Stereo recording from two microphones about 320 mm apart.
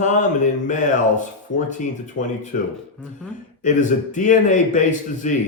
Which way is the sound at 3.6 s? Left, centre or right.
Left.